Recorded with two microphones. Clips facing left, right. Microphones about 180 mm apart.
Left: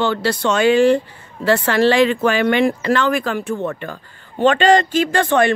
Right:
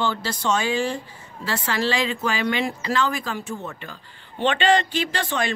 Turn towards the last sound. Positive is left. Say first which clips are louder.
# left 10 dB
turn(degrees=55)  # may be behind; listen again after turning